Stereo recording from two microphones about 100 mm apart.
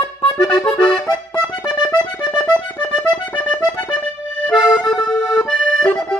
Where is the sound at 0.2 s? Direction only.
55° left (ahead or behind).